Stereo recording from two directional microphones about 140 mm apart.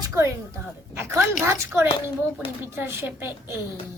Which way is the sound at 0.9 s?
20° right (ahead or behind).